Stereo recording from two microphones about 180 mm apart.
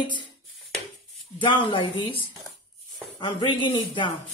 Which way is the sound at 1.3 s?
25° left (ahead or behind).